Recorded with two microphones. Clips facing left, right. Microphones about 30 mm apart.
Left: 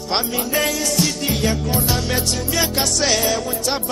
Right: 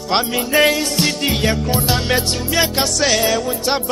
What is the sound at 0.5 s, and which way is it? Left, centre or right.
Music, right.